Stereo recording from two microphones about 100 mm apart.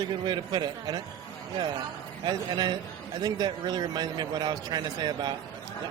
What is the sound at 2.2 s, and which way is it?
A man's voice, 45° right (ahead or behind).